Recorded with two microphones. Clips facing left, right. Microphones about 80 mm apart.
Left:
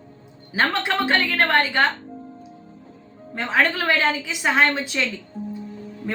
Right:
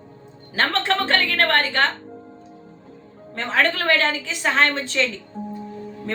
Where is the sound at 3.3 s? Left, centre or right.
Centre.